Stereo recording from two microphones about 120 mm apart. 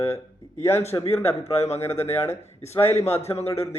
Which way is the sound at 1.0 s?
60° left (ahead or behind).